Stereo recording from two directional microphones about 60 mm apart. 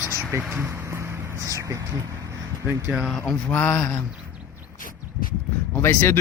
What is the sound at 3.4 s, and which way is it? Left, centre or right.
Speech, left.